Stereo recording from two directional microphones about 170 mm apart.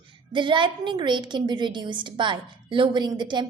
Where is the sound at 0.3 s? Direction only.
30° right (ahead or behind).